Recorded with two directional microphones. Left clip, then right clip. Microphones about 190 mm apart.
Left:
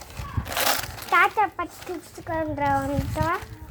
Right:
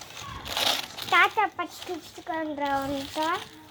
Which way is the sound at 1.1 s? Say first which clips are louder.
Left 2 dB; 15° right (ahead or behind).